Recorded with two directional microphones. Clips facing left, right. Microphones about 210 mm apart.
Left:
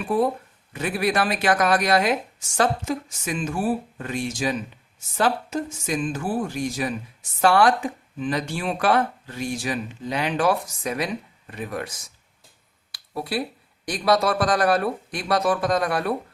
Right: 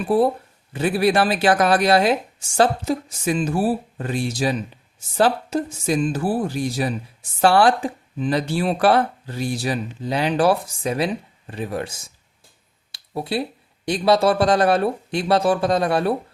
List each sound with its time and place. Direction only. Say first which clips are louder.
0.1 s speech: right 4 dB; 35° right (ahead or behind)
12.9 s a sound: right 3 dB; 25° right (ahead or behind)
13.8 s speech: right 4 dB; 25° right (ahead or behind)